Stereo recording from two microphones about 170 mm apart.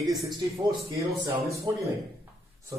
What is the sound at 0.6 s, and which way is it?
A man's voice, 20° right (ahead or behind).